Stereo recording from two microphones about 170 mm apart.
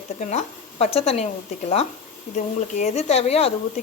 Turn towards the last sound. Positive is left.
turn(degrees=35)  # may be behind; listen again after turning